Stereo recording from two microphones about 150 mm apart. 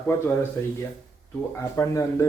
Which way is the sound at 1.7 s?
20° left (ahead or behind).